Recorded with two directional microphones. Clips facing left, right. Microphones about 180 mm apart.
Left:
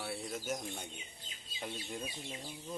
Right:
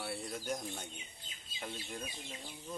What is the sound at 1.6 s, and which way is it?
Speech, 20° left (ahead or behind).